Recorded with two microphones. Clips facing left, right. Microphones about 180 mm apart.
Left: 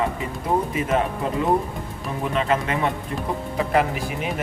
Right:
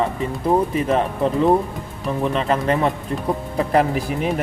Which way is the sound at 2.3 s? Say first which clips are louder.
Right 1 dB; 35° right (ahead or behind).